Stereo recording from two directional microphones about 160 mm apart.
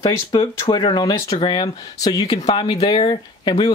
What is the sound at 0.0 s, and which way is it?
Speech, 30° left (ahead or behind).